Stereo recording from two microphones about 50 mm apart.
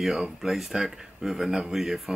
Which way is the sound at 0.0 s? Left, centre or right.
Centre.